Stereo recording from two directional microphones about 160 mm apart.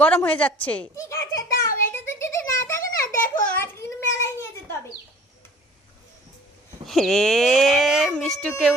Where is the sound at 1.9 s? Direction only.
15° left (ahead or behind).